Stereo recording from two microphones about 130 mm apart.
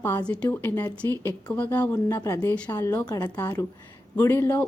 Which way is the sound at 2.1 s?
25° left (ahead or behind).